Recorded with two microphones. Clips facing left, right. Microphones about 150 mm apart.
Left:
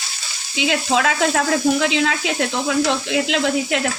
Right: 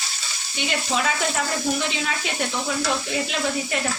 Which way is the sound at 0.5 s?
90° left.